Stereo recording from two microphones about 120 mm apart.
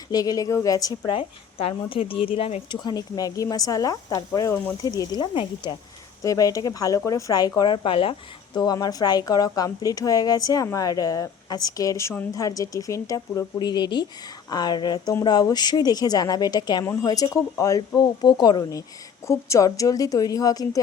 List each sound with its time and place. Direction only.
0.1 s speech: 30° left (ahead or behind)
1.1 s speech: 50° left (ahead or behind)
2.8 s a woman's voice: 30° left (ahead or behind)
5.3 s speech: 45° left (ahead or behind)
6.2 s speech: 30° left (ahead or behind); by 8.1 s 45° left (ahead or behind)
8.5 s a woman's voice: 35° left (ahead or behind)